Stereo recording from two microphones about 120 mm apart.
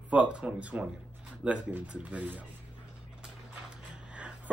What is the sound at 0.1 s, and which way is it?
A man's voice, 10° right (ahead or behind).